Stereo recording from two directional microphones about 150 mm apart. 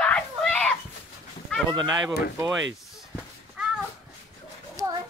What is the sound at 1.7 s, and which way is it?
Speech, 25° right (ahead or behind).